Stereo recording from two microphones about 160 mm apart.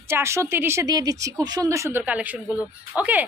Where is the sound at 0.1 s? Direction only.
15° right (ahead or behind).